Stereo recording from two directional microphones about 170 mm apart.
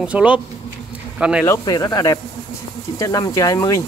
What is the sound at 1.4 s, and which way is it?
Speech, 20° left (ahead or behind).